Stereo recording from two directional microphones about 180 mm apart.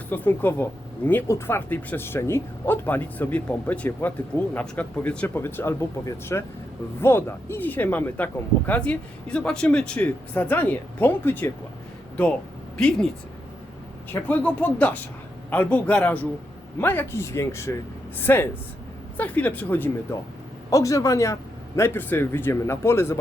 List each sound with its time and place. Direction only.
0.1 s speech: 10° left (ahead or behind)
12.7 s speech: 5° left (ahead or behind)
14.1 s speech: 10° left (ahead or behind)